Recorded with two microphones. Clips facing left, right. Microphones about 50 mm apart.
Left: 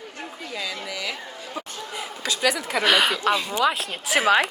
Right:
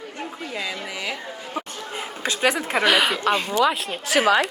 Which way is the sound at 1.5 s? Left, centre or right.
Right.